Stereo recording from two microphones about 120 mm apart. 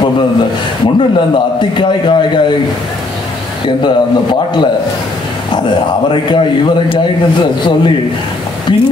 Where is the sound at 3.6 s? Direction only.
40° left (ahead or behind).